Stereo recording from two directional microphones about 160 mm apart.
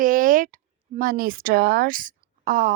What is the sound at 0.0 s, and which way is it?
A woman's voice, 60° right (ahead or behind).